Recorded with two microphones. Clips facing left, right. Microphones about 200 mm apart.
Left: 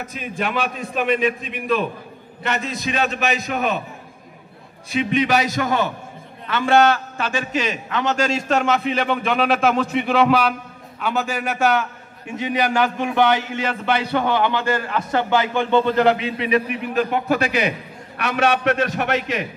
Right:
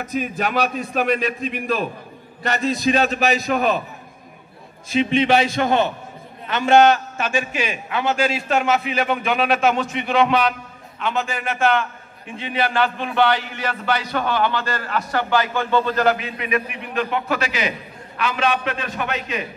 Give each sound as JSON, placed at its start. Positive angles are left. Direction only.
{"t": 0.4, "sound": "a man's voice", "side_deg": -40}
{"t": 4.8, "sound": "a man's voice", "side_deg": -30}